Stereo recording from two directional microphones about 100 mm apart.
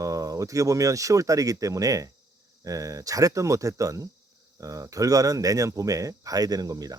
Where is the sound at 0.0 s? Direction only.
35° right (ahead or behind).